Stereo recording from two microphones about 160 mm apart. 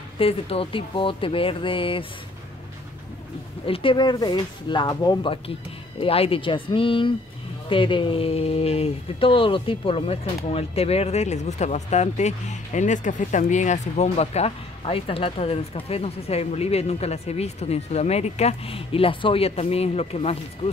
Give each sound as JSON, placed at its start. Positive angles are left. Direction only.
{"t": 0.2, "sound": "speech", "side_deg": 35}
{"t": 3.6, "sound": "speech", "side_deg": 35}